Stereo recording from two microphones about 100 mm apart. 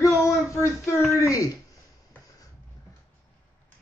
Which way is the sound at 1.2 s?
35° left (ahead or behind).